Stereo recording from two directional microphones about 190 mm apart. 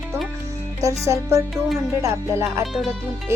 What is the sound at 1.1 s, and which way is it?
Speech, 15° right (ahead or behind).